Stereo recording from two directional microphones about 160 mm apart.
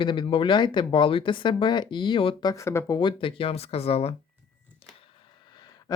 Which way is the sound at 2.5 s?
15° left (ahead or behind).